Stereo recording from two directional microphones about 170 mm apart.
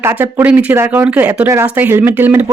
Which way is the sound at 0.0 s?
15° right (ahead or behind).